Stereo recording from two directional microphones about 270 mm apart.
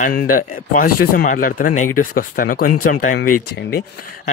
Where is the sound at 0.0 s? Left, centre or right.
Left.